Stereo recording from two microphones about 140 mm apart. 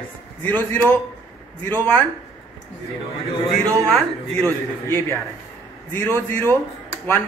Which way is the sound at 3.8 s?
5° left (ahead or behind).